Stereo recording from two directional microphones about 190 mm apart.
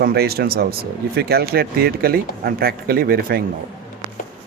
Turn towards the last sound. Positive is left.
turn(degrees=-50)  # may be behind; listen again after turning